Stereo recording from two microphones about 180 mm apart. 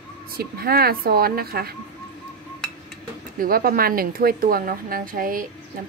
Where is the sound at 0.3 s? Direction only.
55° right (ahead or behind).